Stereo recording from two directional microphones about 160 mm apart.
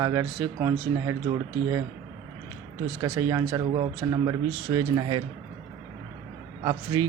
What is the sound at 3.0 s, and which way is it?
Speech, 20° right (ahead or behind).